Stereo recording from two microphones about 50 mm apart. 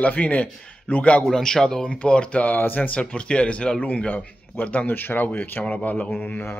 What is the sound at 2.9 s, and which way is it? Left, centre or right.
A man's voice, left.